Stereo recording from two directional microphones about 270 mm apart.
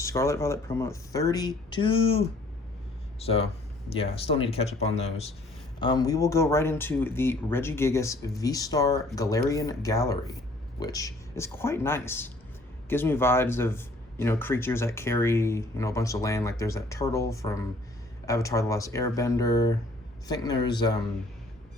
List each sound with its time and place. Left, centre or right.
0.0 s speech: centre